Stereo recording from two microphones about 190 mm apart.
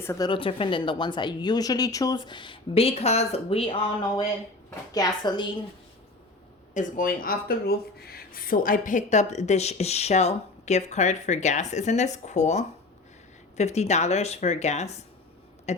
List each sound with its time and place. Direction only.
0.0 s a woman's voice: 15° left (ahead or behind)
0.3 s speech: 25° left (ahead or behind)
4.9 s speech: 20° left (ahead or behind)
6.7 s speech: 45° left (ahead or behind)